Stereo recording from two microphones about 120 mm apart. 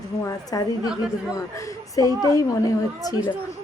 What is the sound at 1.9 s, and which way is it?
Speech, 30° left (ahead or behind).